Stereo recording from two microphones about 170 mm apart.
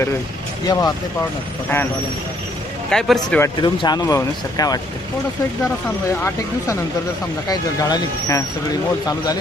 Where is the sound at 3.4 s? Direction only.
25° left (ahead or behind).